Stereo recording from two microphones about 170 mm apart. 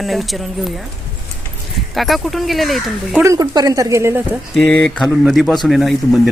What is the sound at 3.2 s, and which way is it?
Speech, 20° right (ahead or behind).